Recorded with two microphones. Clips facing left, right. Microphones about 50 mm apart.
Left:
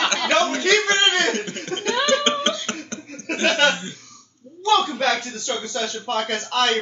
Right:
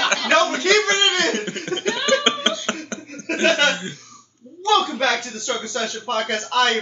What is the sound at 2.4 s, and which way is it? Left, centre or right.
Beatboxing, right.